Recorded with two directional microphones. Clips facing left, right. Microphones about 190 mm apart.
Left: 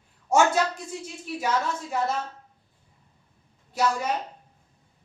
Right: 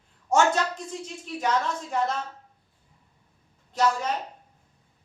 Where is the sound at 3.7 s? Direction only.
10° left (ahead or behind).